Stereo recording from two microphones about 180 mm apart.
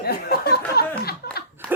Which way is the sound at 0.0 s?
60° left (ahead or behind).